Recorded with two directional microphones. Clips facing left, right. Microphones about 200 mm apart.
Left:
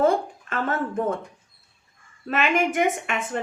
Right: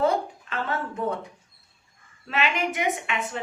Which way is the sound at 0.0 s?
50° left (ahead or behind).